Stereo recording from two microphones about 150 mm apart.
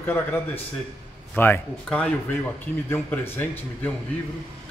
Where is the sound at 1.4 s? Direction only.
10° left (ahead or behind).